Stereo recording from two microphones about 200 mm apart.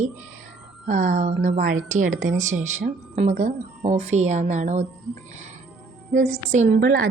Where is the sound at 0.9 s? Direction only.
40° right (ahead or behind).